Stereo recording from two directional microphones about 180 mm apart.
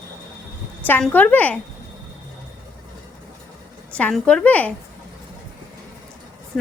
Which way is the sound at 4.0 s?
5° left (ahead or behind).